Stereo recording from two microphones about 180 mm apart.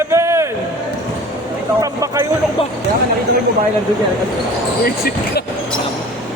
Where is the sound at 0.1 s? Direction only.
15° right (ahead or behind).